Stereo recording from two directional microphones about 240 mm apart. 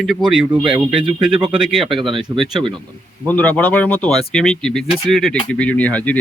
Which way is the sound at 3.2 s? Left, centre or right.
Centre.